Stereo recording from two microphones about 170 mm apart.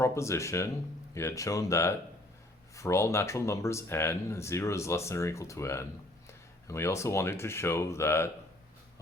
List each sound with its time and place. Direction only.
0.0 s speech: 15° left (ahead or behind)